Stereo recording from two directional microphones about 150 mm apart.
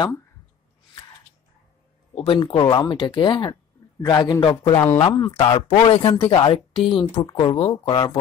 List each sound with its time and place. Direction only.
2.1 s a man's voice: 35° left (ahead or behind)